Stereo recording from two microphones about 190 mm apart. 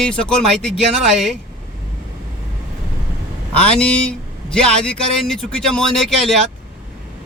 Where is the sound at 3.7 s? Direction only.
5° left (ahead or behind).